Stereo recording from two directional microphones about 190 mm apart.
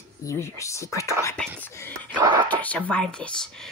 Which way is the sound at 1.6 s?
10° left (ahead or behind).